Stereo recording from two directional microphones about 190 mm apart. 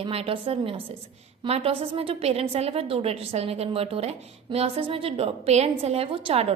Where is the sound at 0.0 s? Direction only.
30° right (ahead or behind).